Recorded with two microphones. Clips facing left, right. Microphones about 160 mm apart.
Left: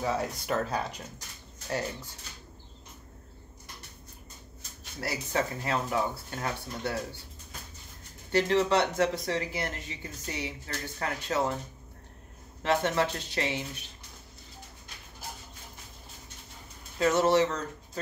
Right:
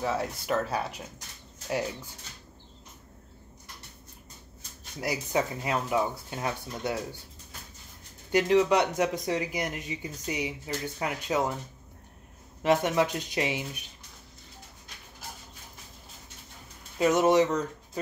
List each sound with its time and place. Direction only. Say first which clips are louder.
0.0 s speech: even; centre (ahead or behind)
5.0 s speech: right 2 dB; 15° right (ahead or behind)
8.3 s speech: right 3 dB; 15° right (ahead or behind)
12.6 s speech: right 3 dB; 15° right (ahead or behind)
17.0 s speech: right 2 dB; 15° right (ahead or behind)